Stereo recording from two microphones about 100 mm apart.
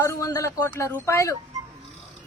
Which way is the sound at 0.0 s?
30° left (ahead or behind).